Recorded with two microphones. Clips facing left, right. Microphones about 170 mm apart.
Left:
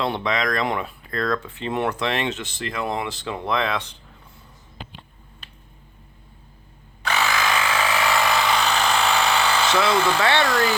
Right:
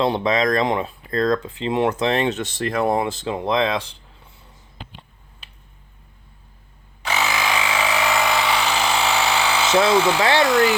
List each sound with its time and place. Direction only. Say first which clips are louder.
0.0 s speech: right 5 dB; 25° right (ahead or behind)
3.5 s speech: right 3 dB; 20° right (ahead or behind)
7.1 s tools: even; 15° right (ahead or behind)
8.3 s electric toothbrush: even; 5° right (ahead or behind)
10.3 s speech: right 4 dB; 10° right (ahead or behind)